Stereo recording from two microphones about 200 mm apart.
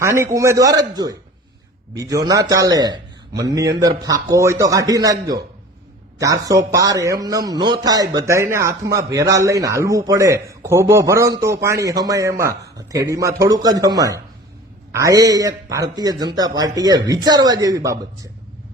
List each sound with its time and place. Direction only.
0.0 s a man's voice: 15° right (ahead or behind)
6.1 s a man's voice: 15° right (ahead or behind)